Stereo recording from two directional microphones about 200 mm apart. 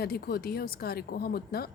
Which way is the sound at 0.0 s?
50° left (ahead or behind).